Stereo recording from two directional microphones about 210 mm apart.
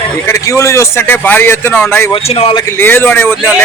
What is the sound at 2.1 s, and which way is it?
Speech, 25° left (ahead or behind).